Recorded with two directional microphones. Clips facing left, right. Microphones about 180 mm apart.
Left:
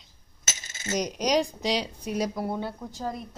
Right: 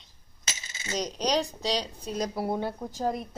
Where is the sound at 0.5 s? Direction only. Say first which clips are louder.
Left 3 dB; 50° left (ahead or behind).